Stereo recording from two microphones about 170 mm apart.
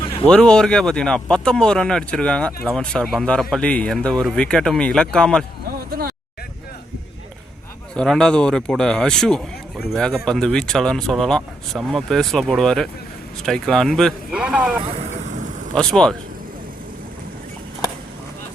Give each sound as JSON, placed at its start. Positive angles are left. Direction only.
{"t": 0.3, "sound": "speech", "side_deg": 5}
{"t": 5.9, "sound": "speech", "side_deg": -60}
{"t": 7.9, "sound": "speech", "side_deg": 5}
{"t": 15.3, "sound": "vehicle", "side_deg": -50}
{"t": 15.7, "sound": "speech", "side_deg": 5}